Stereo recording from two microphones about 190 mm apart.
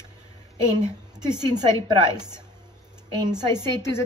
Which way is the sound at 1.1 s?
20° right (ahead or behind).